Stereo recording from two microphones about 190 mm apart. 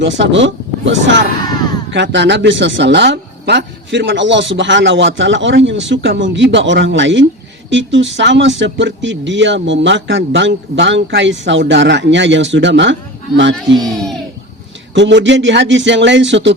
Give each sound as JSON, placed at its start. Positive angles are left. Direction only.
{"t": 0.0, "sound": "speech", "side_deg": -70}
{"t": 1.5, "sound": "a sound", "side_deg": 20}
{"t": 1.9, "sound": "speech", "side_deg": -70}
{"t": 13.7, "sound": "speech", "side_deg": 0}
{"t": 14.9, "sound": "speech", "side_deg": -70}